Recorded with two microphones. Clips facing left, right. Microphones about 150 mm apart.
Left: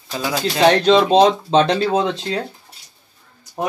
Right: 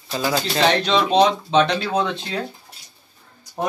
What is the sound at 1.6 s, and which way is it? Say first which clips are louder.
Speech: left 4 dB; 25° left (ahead or behind).